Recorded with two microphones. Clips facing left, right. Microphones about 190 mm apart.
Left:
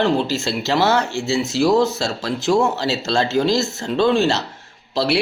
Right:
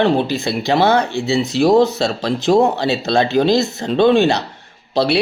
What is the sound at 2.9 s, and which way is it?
Speech, 60° right (ahead or behind).